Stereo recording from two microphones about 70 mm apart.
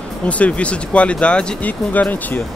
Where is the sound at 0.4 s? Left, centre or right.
Centre.